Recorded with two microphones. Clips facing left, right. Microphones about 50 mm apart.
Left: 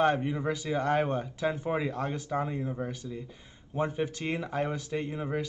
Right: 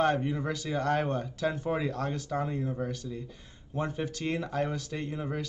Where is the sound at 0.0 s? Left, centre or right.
Centre.